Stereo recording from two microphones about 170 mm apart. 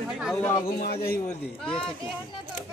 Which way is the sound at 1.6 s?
5° left (ahead or behind).